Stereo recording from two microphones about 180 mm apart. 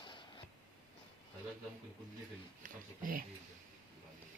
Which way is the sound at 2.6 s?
50° right (ahead or behind).